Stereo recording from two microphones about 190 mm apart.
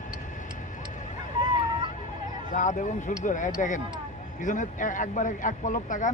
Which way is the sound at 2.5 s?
40° left (ahead or behind).